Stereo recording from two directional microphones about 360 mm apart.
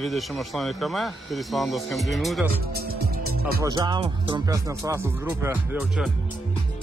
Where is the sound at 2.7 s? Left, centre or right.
Right.